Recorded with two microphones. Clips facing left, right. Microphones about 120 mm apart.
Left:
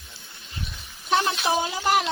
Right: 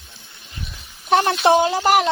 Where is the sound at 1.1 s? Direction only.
60° right (ahead or behind).